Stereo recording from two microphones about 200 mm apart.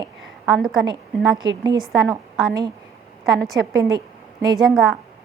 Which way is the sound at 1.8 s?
Centre (ahead or behind).